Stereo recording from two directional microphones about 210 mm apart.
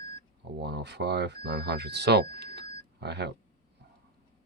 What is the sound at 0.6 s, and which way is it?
Speech, 50° right (ahead or behind).